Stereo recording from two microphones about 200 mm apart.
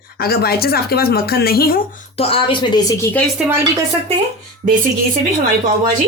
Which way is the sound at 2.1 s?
30° left (ahead or behind).